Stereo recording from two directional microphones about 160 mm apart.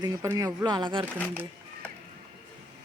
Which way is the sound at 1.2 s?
10° left (ahead or behind).